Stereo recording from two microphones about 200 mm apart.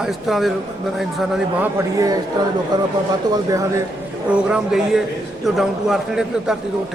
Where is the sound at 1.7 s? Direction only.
15° right (ahead or behind).